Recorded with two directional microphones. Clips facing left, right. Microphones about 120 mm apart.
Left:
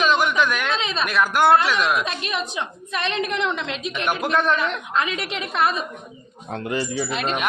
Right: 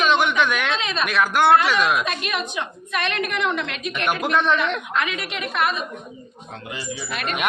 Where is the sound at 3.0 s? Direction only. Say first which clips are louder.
Even; 30° left (ahead or behind).